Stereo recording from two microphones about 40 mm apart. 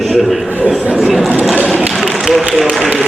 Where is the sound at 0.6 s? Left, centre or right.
Right.